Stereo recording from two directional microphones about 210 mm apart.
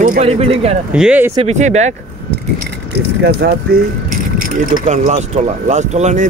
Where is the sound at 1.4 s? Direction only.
35° right (ahead or behind).